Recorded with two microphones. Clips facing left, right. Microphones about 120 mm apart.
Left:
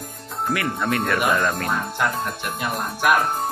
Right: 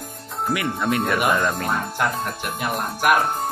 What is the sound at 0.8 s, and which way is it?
Speech, 20° right (ahead or behind).